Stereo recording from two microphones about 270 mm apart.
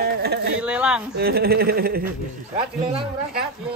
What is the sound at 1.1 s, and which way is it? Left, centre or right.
Speech, right.